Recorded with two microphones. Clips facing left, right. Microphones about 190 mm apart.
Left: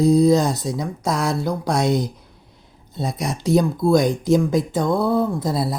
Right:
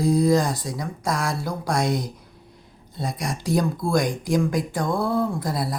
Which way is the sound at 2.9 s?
25° left (ahead or behind).